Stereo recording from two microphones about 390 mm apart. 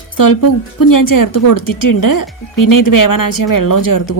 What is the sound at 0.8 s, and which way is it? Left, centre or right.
A woman's voice, left.